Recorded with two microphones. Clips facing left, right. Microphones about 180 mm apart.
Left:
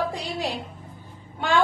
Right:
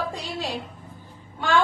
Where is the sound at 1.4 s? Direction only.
15° left (ahead or behind).